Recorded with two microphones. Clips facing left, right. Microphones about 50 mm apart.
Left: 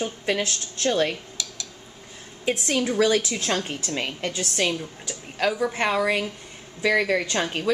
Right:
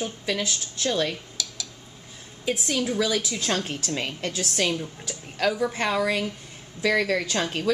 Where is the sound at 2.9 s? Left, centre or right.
Left.